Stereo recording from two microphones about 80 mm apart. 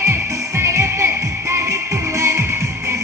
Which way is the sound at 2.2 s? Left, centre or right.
Right.